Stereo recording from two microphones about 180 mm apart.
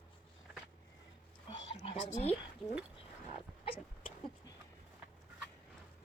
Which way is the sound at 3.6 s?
30° left (ahead or behind).